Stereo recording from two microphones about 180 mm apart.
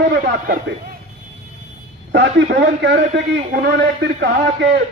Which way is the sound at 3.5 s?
70° right (ahead or behind).